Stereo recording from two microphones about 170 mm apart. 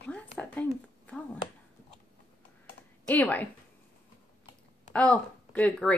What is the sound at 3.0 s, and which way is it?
Speech, 10° left (ahead or behind).